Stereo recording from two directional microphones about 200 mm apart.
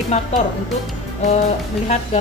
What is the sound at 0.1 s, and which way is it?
Speech, 35° left (ahead or behind).